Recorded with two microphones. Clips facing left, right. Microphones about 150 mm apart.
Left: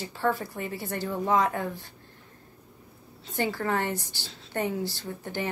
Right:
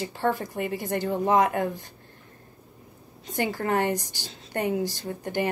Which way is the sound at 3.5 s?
15° right (ahead or behind).